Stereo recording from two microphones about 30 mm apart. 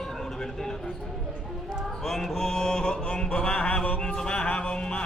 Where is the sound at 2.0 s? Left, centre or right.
Centre.